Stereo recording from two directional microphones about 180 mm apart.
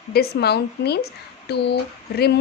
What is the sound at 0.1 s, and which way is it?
A woman's voice, 60° left (ahead or behind).